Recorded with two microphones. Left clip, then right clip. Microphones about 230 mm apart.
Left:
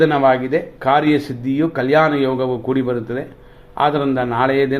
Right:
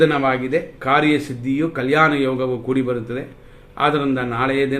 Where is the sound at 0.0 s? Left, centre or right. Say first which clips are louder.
Left 3 dB; centre.